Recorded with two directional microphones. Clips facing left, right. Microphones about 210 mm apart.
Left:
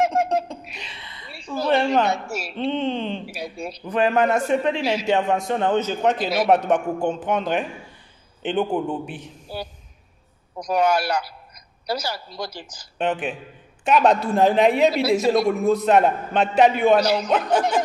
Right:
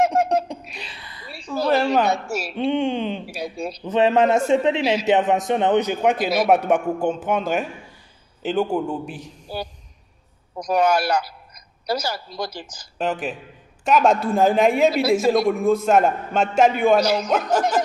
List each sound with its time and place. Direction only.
0.7 s a sound: centre (ahead or behind)
1.7 s a man's voice: 5° right (ahead or behind)
2.0 s a man's voice: 40° right (ahead or behind)
2.5 s a man's voice: 15° right (ahead or behind)
3.3 s a man's voice: 40° right (ahead or behind)
3.8 s a man's voice: 25° right (ahead or behind); by 8.9 s 5° left (ahead or behind)
9.1 s a man's voice: 40° right (ahead or behind)
12.9 s a man's voice: centre (ahead or behind)
14.9 s a woman's voice: 50° right (ahead or behind)
15.3 s a man's voice: centre (ahead or behind)
17.0 s a woman's voice: 45° right (ahead or behind)